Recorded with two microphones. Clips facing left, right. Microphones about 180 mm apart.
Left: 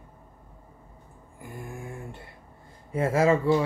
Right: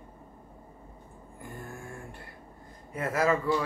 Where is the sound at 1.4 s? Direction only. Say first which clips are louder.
Left 3 dB; 10° left (ahead or behind).